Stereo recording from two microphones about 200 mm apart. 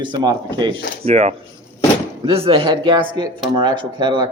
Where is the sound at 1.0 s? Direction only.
35° right (ahead or behind).